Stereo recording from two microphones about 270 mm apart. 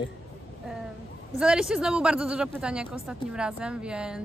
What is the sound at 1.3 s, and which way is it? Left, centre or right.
A woman's voice, centre.